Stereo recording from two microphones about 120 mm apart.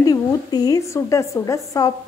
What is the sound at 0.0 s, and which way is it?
A woman's voice, 35° left (ahead or behind).